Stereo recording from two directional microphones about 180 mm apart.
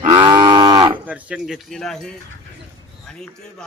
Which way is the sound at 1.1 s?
5° right (ahead or behind).